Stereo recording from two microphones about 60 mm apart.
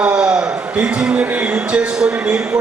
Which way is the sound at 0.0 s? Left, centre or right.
Centre.